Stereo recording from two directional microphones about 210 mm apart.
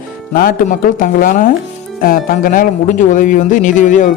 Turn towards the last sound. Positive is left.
turn(degrees=35)  # may be behind; listen again after turning